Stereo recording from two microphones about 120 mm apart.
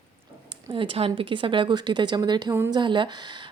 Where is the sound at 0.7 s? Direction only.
50° right (ahead or behind).